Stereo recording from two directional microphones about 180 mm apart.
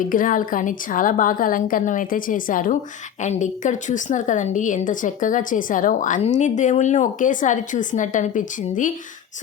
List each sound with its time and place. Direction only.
0.1 s a woman's voice: 50° left (ahead or behind)